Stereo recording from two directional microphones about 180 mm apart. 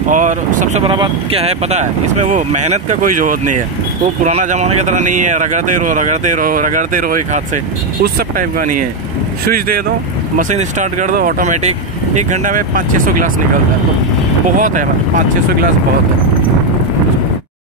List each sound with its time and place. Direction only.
0.1 s speech: 45° right (ahead or behind)
0.9 s speech: 30° right (ahead or behind); by 8.8 s 50° right (ahead or behind)
10.3 s speech: 40° right (ahead or behind)
14.6 s speech: 45° right (ahead or behind)